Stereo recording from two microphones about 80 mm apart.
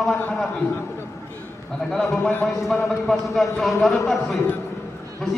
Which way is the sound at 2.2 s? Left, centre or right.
Left.